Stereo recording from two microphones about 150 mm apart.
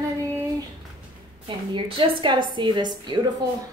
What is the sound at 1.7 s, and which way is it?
A woman's voice, 30° right (ahead or behind).